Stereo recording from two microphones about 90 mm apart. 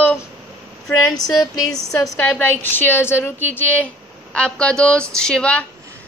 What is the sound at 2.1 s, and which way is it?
A woman's voice, 20° left (ahead or behind).